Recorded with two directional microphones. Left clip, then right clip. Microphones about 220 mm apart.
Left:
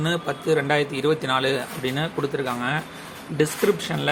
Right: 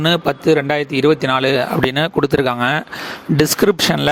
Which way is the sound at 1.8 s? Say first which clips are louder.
Right 9 dB; 50° right (ahead or behind).